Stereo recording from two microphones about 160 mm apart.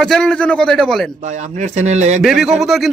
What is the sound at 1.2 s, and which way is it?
Speech, 45° right (ahead or behind).